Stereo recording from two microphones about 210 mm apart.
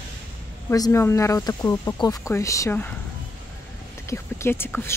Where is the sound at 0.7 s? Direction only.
15° left (ahead or behind).